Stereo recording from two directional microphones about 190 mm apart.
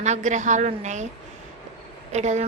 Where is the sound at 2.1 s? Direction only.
35° right (ahead or behind).